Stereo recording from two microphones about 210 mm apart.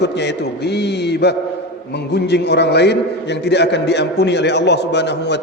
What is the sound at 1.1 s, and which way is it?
A man's voice, 50° left (ahead or behind).